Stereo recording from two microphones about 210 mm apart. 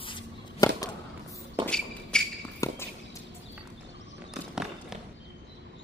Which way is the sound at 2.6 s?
15° left (ahead or behind).